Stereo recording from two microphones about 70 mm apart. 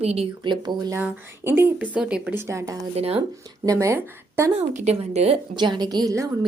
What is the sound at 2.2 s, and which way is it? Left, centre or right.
Speech, right.